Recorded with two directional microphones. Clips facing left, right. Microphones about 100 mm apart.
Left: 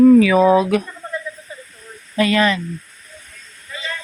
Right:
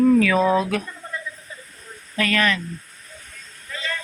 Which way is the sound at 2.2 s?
15° left (ahead or behind).